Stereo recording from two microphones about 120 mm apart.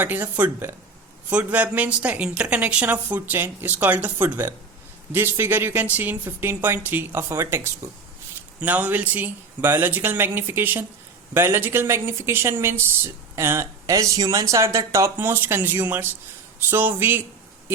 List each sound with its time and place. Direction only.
0.0 s a woman's voice: 15° right (ahead or behind)